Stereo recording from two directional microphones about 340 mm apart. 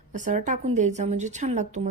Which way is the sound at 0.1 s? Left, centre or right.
Right.